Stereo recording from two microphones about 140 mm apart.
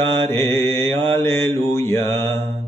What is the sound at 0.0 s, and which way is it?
Mantra, 15° left (ahead or behind).